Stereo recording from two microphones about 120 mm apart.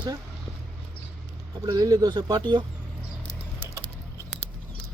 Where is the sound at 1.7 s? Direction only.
35° right (ahead or behind).